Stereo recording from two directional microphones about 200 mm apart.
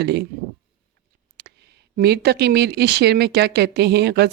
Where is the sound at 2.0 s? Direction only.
50° right (ahead or behind).